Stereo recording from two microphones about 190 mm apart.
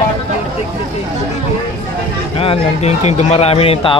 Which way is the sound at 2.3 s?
30° left (ahead or behind).